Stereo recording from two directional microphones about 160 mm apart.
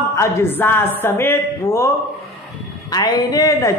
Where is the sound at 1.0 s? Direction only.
15° left (ahead or behind).